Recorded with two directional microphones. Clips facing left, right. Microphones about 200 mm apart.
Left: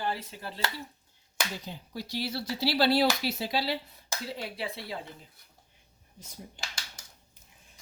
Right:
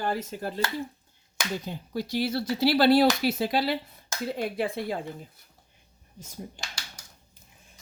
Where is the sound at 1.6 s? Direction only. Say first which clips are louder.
Right 7 dB; 50° right (ahead or behind).